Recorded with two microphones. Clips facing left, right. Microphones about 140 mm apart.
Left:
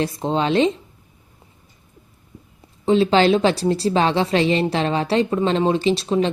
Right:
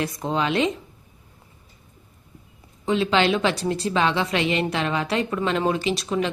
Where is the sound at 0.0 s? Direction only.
30° left (ahead or behind).